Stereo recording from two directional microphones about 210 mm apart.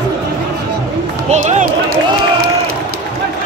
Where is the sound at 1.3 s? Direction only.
35° right (ahead or behind).